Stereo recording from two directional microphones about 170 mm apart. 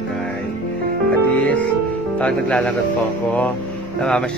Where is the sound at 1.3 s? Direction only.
10° left (ahead or behind).